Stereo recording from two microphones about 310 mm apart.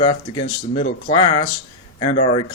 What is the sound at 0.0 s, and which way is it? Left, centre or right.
Speech, centre.